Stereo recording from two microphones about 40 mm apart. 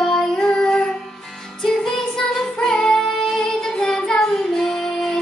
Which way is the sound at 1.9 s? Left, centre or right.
Centre.